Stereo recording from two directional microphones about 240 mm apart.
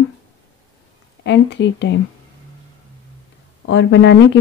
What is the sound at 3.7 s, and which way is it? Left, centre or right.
Speech, left.